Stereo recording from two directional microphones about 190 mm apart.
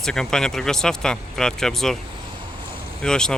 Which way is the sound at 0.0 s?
5° left (ahead or behind).